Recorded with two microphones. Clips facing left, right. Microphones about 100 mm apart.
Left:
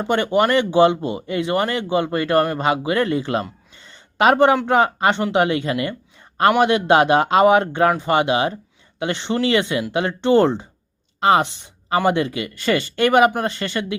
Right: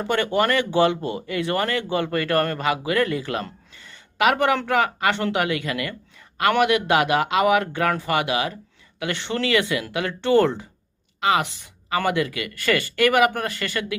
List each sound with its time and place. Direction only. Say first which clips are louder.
0.0 s speech: left 3 dB; 20° left (ahead or behind)
3.8 s a sound: even; 20° left (ahead or behind)
4.2 s speech: left 5 dB; 30° left (ahead or behind)